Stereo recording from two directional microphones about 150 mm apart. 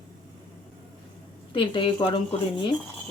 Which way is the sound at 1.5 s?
35° left (ahead or behind).